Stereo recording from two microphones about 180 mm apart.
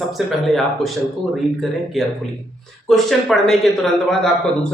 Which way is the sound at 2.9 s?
Centre (ahead or behind).